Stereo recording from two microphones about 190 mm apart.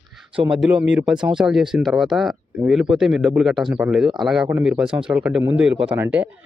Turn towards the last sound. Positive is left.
turn(degrees=-10)  # may be behind; listen again after turning